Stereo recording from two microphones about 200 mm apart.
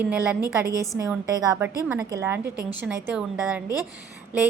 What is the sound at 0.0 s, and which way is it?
A woman's voice, 10° right (ahead or behind).